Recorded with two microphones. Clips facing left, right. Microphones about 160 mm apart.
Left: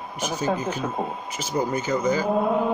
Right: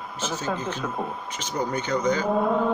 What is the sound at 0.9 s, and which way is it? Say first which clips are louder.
Speech: left 2 dB; 25° left (ahead or behind).